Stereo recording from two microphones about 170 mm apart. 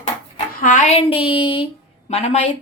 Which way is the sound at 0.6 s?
45° left (ahead or behind).